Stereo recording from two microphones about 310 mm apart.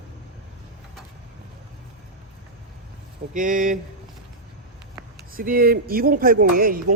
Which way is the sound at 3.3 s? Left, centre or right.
Right.